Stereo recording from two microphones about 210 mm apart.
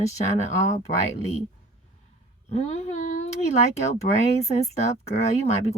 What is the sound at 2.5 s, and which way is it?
Speech, 30° left (ahead or behind).